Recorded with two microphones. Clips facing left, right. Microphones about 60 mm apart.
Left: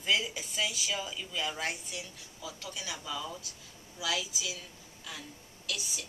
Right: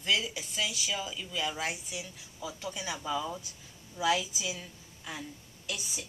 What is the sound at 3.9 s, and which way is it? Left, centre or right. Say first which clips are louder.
Speech: right 6 dB; right.